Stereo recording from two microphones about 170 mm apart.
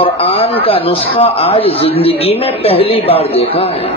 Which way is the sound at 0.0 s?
35° left (ahead or behind).